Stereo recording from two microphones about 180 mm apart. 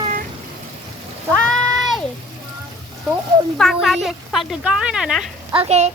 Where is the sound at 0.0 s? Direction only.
45° right (ahead or behind).